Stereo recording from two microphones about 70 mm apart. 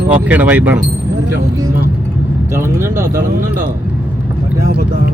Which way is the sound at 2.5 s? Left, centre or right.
Right.